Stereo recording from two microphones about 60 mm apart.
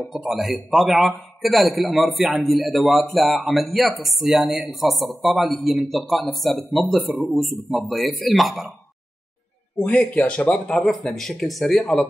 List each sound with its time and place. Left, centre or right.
0.0 s a man's voice: centre
9.8 s speech: left
10.7 s a man's voice: centre